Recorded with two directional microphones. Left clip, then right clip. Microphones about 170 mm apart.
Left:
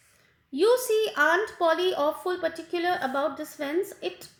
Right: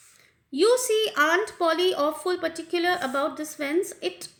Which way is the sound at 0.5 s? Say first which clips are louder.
Right 1 dB; 25° right (ahead or behind).